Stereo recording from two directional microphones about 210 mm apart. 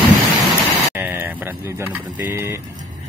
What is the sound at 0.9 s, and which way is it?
Speech, 10° right (ahead or behind).